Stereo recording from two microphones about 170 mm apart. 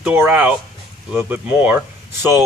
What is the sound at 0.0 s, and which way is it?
A man's voice, 10° right (ahead or behind).